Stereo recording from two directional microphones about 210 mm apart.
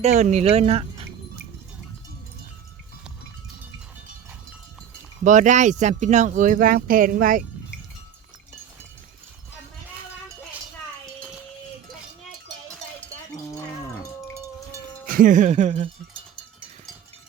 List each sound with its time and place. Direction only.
0.0 s speech: 30° right (ahead or behind)
5.2 s speech: 35° right (ahead or behind)
14.3 s wind chime: 10° right (ahead or behind)
15.0 s speech: 40° right (ahead or behind)